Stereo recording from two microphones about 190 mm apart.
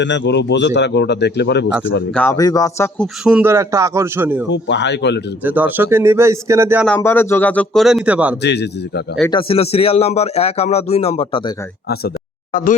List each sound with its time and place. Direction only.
0.0 s speech: 65° left (ahead or behind)
2.1 s speech: 15° left (ahead or behind)
3.2 s speech: 10° right (ahead or behind)
4.5 s speech: 65° left (ahead or behind)
5.5 s speech: 10° right (ahead or behind)
6.8 s speech: 10° left (ahead or behind); by 8.4 s 5° right (ahead or behind)
8.4 s speech: 60° left (ahead or behind)
9.3 s speech: 30° left (ahead or behind)